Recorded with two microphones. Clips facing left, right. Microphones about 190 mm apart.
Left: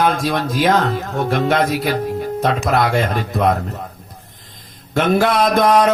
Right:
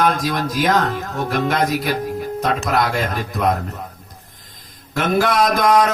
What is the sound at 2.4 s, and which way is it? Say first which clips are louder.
Speech: left 2 dB; 25° left (ahead or behind).